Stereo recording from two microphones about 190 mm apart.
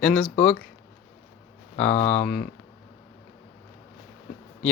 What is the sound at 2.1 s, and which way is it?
Speech, 5° left (ahead or behind).